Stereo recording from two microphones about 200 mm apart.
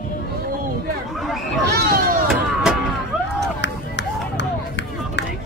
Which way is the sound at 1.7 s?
50° right (ahead or behind).